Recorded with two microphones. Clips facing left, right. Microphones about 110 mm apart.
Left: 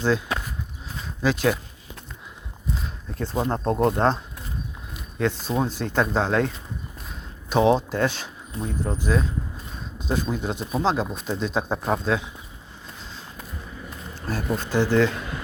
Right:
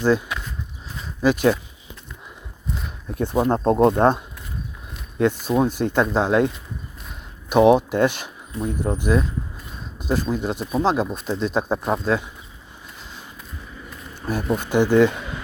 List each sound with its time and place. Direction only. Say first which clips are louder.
1.2 s speech: right 4 dB; 10° right (ahead or behind)
3.2 s speech: right 5 dB; 20° right (ahead or behind)
7.5 s speech: right 5 dB; 10° right (ahead or behind)
14.2 s speech: right 4 dB; 15° right (ahead or behind)